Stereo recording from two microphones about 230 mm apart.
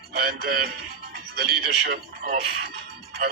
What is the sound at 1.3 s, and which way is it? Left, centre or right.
Speech, right.